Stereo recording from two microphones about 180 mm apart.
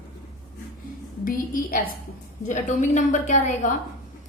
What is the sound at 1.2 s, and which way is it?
A woman's voice, 50° left (ahead or behind).